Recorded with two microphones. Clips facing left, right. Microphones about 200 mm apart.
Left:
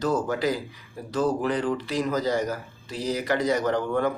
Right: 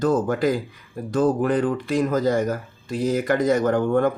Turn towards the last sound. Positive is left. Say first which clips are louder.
# right 5 dB
turn(degrees=-50)  # may be behind; listen again after turning